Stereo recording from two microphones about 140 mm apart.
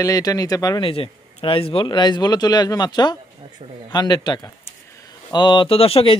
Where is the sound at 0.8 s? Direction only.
40° left (ahead or behind).